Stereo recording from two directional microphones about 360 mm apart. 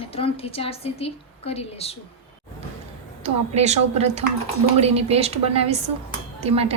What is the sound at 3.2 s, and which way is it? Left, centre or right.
A woman's voice, centre.